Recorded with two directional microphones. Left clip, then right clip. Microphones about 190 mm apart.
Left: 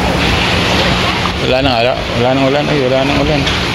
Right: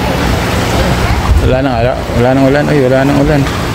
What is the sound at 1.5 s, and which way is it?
Boat, 15° right (ahead or behind).